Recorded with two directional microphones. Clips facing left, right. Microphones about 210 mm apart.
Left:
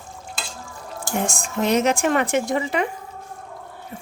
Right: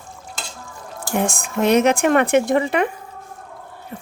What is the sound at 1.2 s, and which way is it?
Speech, 60° right (ahead or behind).